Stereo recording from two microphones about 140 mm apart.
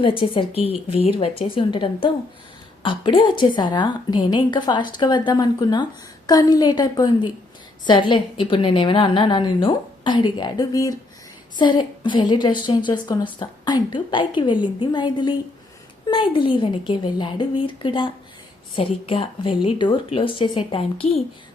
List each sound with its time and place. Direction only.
0.0 s a woman's voice: 35° left (ahead or behind)
21.0 s a woman's voice: 50° left (ahead or behind)